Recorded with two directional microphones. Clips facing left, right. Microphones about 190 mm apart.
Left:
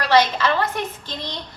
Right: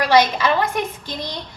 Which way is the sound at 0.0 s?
15° right (ahead or behind).